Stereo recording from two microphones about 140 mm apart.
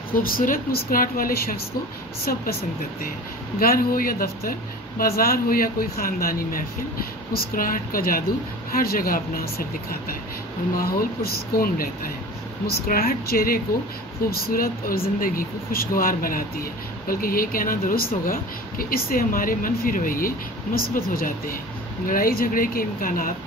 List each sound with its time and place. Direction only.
0.1 s speech: 90° left
3.5 s speech: 90° left